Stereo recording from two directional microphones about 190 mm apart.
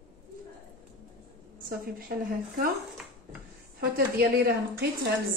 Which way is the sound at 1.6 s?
50° right (ahead or behind).